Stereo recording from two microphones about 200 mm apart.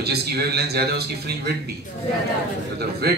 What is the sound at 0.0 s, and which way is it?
A man's voice, 55° right (ahead or behind).